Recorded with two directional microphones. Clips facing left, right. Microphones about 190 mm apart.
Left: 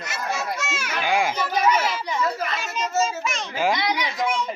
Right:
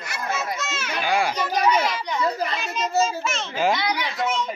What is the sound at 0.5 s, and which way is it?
Speech, 10° left (ahead or behind).